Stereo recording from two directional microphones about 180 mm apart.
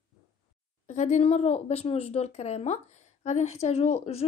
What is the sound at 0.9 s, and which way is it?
A woman's voice, 40° left (ahead or behind).